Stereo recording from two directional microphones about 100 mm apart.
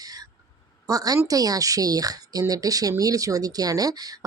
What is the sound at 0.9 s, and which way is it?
Speech, 35° right (ahead or behind).